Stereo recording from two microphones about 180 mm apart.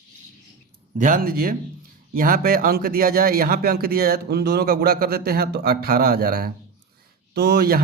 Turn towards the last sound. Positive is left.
turn(degrees=-60)  # may be behind; listen again after turning